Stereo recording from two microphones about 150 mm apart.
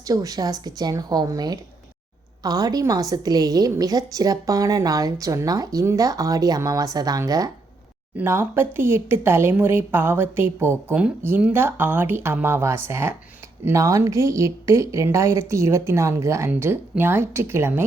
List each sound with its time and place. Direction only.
0.0 s a woman's voice: 25° right (ahead or behind)